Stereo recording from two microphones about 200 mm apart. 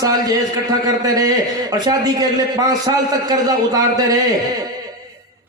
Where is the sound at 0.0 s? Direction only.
20° right (ahead or behind).